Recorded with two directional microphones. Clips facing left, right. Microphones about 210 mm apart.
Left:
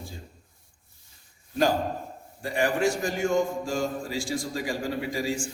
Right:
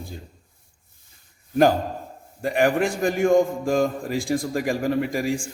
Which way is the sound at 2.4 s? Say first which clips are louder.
Right 4 dB; 60° right (ahead or behind).